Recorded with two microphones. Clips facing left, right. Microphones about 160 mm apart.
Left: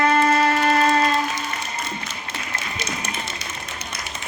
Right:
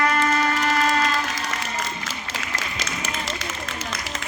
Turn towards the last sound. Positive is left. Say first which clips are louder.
# left 1 dB
turn(degrees=-90)